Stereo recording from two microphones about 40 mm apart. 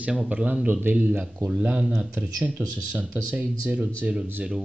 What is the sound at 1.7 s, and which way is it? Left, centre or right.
Speech, right.